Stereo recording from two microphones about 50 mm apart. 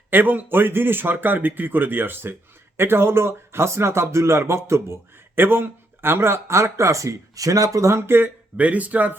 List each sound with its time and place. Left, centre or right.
0.1 s a man's voice: right
8.5 s speech: right